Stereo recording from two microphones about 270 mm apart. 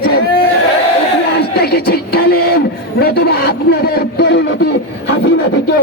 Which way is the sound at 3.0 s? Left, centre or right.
Left.